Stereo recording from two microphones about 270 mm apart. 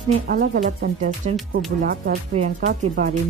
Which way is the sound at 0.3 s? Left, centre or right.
Right.